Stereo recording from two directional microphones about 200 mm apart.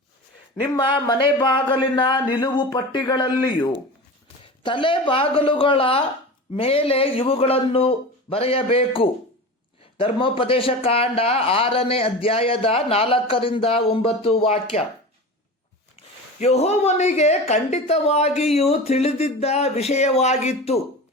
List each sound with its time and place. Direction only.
0.8 s speech: 25° left (ahead or behind)
16.4 s a woman's voice: 30° left (ahead or behind)